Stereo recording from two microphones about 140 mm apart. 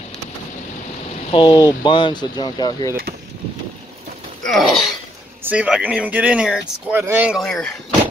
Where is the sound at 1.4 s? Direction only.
30° left (ahead or behind).